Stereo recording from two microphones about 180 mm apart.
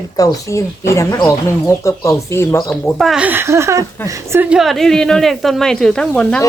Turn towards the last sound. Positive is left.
turn(degrees=5)  # may be behind; listen again after turning